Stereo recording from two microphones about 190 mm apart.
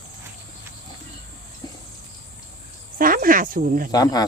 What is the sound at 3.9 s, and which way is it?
Speech, 20° left (ahead or behind).